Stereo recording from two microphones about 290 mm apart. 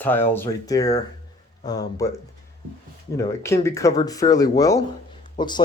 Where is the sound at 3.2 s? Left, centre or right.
Centre.